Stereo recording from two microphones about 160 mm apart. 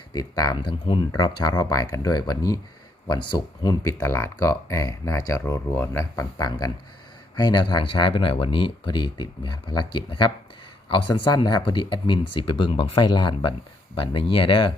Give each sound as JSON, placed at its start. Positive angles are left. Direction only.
{"t": 0.1, "sound": "speech", "side_deg": 25}